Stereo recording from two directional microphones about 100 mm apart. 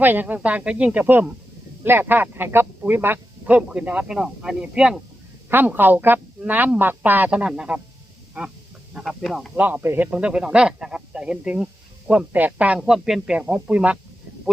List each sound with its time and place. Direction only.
0.0 s speech: 20° right (ahead or behind)
5.5 s speech: 20° right (ahead or behind)
9.0 s speech: centre (ahead or behind)
9.6 s speech: 15° right (ahead or behind)
10.1 s speech: 10° right (ahead or behind)